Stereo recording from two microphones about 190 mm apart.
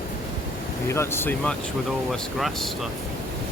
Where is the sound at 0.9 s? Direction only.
15° left (ahead or behind).